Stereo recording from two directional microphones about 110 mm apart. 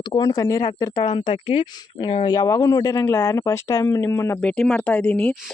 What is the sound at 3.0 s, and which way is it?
Speech, 25° left (ahead or behind).